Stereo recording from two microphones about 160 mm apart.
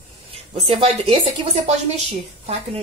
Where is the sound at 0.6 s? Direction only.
35° right (ahead or behind).